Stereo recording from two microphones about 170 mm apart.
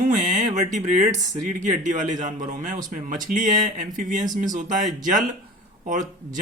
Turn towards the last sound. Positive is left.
turn(degrees=-50)  # may be behind; listen again after turning